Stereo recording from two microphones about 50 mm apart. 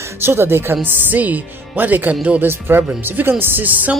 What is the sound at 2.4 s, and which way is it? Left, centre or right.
Speech, right.